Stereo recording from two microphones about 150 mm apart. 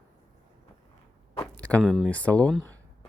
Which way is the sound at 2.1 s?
10° left (ahead or behind).